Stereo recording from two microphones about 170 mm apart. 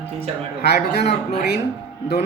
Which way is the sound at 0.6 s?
75° left (ahead or behind).